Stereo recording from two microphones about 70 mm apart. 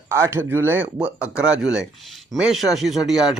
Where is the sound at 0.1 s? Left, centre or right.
Right.